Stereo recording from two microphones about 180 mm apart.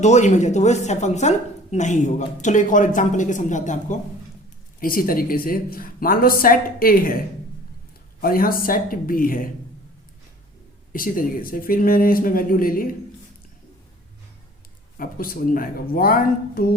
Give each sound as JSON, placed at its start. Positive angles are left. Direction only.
{"t": 0.0, "sound": "speech", "side_deg": 40}
{"t": 8.2, "sound": "speech", "side_deg": 55}
{"t": 10.9, "sound": "speech", "side_deg": 50}
{"t": 14.9, "sound": "speech", "side_deg": 50}